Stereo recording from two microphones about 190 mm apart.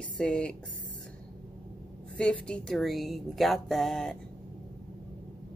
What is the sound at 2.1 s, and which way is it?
Speech, 5° left (ahead or behind).